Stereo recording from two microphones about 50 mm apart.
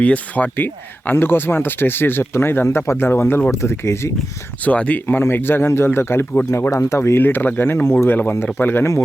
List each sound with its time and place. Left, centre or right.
0.0 s speech: left
2.6 s speech: left
3.5 s speech: left
4.6 s speech: left
5.0 s speech: left
6.5 s speech: left
7.2 s speech: left
8.8 s speech: left